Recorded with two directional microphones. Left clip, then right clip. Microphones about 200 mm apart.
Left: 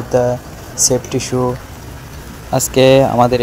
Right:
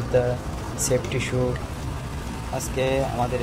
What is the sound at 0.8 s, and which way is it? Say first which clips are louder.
Speech: left 9 dB; 25° left (ahead or behind).